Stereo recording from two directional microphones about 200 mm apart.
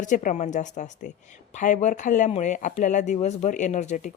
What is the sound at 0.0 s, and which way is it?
Speech, 40° left (ahead or behind).